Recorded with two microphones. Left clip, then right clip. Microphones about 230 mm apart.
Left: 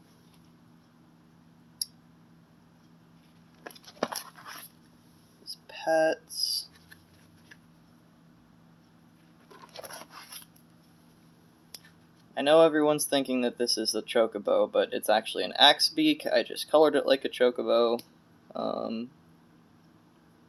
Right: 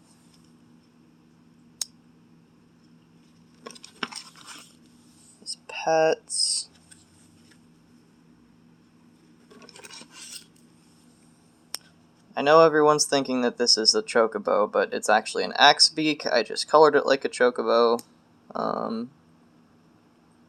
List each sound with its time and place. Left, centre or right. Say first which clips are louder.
5.6 s whispering: right 4 dB; centre
12.3 s speech: right 4 dB; centre